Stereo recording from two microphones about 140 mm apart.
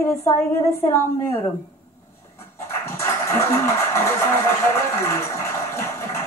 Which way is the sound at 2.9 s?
20° left (ahead or behind).